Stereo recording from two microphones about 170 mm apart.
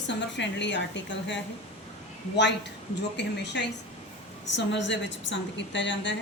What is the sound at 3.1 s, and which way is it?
A woman's voice, 90° left.